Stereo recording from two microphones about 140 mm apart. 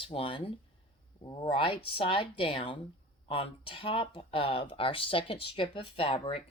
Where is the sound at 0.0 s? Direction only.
40° left (ahead or behind).